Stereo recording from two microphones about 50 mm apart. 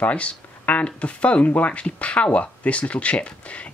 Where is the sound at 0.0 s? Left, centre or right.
Left.